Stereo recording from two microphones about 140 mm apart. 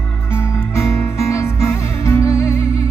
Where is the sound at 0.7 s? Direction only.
20° left (ahead or behind).